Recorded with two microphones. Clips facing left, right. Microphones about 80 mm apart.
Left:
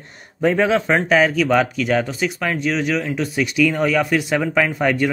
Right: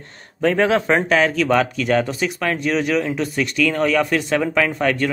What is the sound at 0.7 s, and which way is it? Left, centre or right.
Speech, centre.